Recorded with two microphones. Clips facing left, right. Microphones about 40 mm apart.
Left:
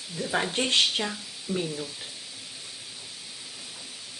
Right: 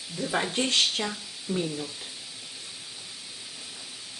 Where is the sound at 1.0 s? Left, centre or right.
Centre.